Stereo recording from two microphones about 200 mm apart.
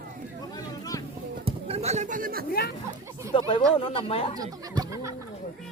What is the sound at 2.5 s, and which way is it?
Speech, 50° left (ahead or behind).